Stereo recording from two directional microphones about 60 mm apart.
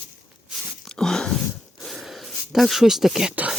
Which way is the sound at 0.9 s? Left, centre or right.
Centre.